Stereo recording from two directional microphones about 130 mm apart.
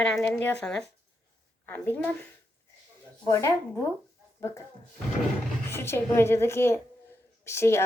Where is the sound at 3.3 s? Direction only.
20° left (ahead or behind).